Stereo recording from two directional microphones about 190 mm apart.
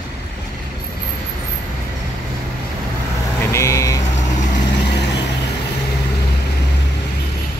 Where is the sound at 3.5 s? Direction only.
15° left (ahead or behind).